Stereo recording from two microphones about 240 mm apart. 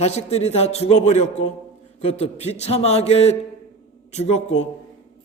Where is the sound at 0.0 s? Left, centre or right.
Left.